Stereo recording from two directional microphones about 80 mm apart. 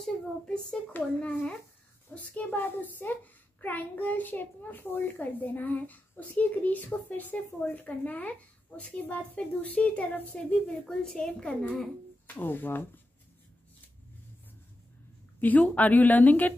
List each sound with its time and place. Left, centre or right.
0.0 s a child's voice: centre
1.0 s a child's voice: left
2.1 s a child's voice: left
15.4 s a child's voice: centre